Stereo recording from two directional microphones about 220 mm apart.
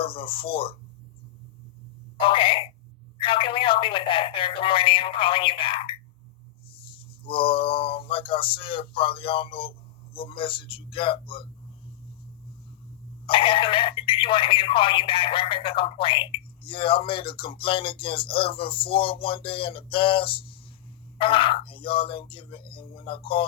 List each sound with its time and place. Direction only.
0.0 s speech: 25° left (ahead or behind)
2.1 s speech: 25° left (ahead or behind)
7.3 s speech: 25° left (ahead or behind)
13.2 s speech: 25° left (ahead or behind)